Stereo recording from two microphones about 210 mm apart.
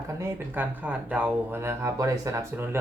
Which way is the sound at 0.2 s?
10° right (ahead or behind).